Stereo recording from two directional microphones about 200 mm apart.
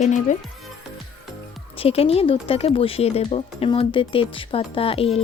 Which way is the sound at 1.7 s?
30° left (ahead or behind).